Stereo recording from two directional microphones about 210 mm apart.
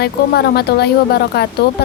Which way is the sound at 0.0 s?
50° left (ahead or behind).